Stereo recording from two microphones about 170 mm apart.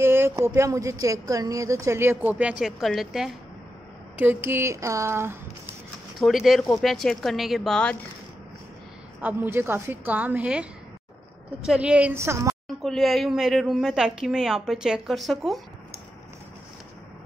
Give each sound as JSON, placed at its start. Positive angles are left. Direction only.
{"t": 0.0, "sound": "a woman's voice", "side_deg": -15}
{"t": 4.2, "sound": "speech", "side_deg": -10}
{"t": 6.1, "sound": "a woman's voice", "side_deg": 0}
{"t": 9.2, "sound": "speech", "side_deg": -10}
{"t": 12.8, "sound": "a woman's voice", "side_deg": 0}